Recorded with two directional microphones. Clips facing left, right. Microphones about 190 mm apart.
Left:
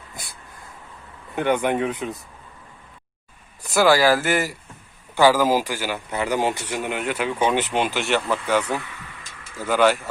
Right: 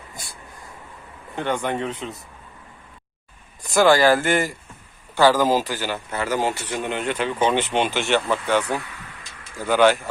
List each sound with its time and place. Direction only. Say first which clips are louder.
1.4 s a man's voice: left 4 dB; 15° left (ahead or behind)
3.6 s a man's voice: right 1 dB; 5° left (ahead or behind)
9.6 s speech: right 2 dB; centre (ahead or behind)